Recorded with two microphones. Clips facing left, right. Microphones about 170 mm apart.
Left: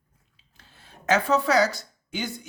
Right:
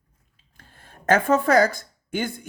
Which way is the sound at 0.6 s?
50° right (ahead or behind).